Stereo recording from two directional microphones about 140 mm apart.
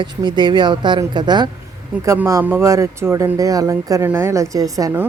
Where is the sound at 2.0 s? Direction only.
20° right (ahead or behind).